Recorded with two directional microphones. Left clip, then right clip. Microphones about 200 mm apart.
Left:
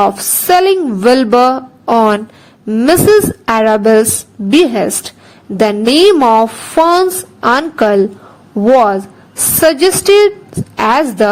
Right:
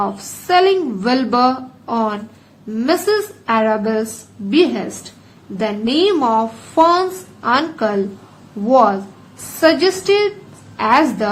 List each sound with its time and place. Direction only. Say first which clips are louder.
0.0 s a woman's voice: left 10 dB; 55° left (ahead or behind)